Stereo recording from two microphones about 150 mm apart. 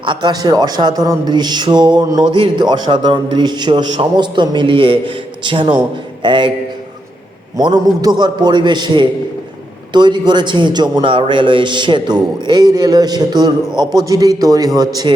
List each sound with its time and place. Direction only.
0.0 s a man's voice: 30° right (ahead or behind)
7.5 s a man's voice: 25° right (ahead or behind)